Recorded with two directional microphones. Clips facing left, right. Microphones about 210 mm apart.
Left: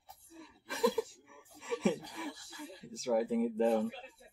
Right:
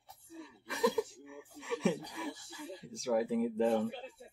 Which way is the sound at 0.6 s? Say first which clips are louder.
Even; centre (ahead or behind).